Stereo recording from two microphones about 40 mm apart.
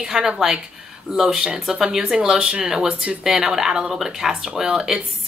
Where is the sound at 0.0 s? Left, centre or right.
Centre.